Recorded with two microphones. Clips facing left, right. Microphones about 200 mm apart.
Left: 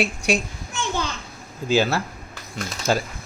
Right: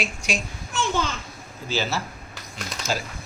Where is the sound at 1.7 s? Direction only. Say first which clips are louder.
Left 7 dB; 55° left (ahead or behind).